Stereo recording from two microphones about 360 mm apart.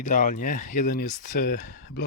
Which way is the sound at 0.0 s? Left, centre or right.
Left.